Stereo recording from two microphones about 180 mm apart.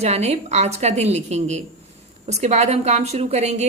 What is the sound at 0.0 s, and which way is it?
A woman's voice, 35° right (ahead or behind).